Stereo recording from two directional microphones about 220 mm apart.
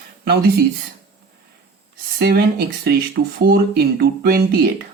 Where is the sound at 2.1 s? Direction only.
45° right (ahead or behind).